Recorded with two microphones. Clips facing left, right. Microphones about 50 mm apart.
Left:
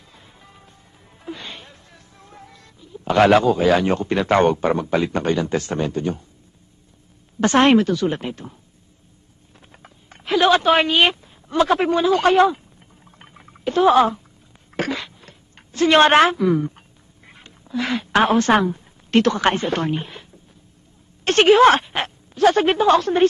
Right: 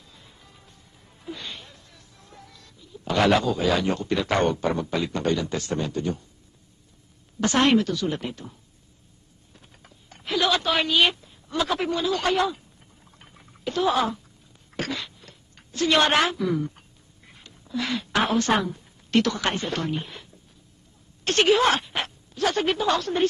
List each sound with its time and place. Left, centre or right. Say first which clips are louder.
0.1 s music: left 6 dB; left
1.2 s speech: left 3 dB; left
7.3 s a woman's voice: left 6 dB; left
9.6 s a sound: left 6 dB; left
17.3 s speech: left 3 dB; left